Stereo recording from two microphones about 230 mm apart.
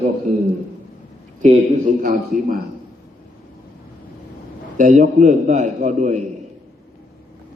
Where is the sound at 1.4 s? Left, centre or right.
Right.